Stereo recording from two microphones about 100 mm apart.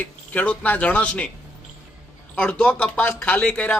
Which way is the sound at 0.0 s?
15° left (ahead or behind).